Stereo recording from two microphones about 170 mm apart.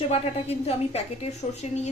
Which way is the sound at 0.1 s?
35° left (ahead or behind).